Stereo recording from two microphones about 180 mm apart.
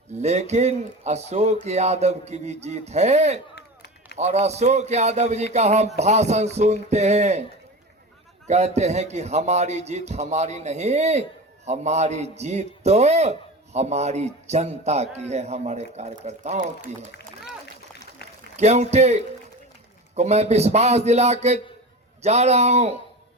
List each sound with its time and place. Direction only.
0.1 s a man's voice: 40° right (ahead or behind)
8.4 s a man's voice: 40° right (ahead or behind)
18.5 s a man's voice: 40° right (ahead or behind)